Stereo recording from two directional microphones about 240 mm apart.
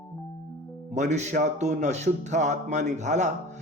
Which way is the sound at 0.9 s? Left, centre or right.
Right.